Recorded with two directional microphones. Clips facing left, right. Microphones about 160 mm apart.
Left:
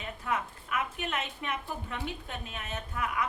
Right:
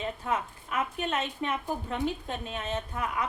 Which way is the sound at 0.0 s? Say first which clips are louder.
Right 3 dB; 30° right (ahead or behind).